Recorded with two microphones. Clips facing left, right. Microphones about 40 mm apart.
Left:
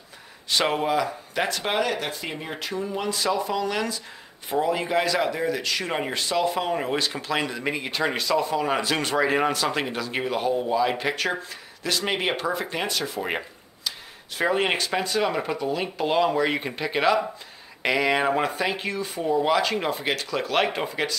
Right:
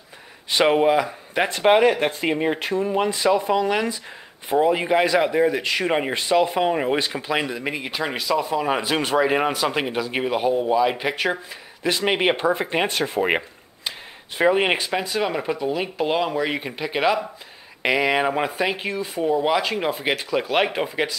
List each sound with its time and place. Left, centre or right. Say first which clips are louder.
0.5 s speech: right 6 dB; centre